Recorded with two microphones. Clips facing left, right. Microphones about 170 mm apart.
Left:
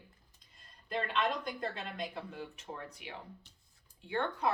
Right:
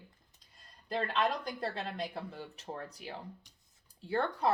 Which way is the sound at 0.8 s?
35° right (ahead or behind).